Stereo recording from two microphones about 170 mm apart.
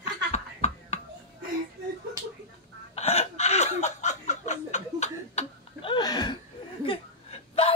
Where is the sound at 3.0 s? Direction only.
40° left (ahead or behind).